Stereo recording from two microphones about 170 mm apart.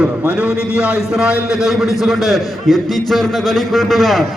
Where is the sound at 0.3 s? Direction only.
5° right (ahead or behind).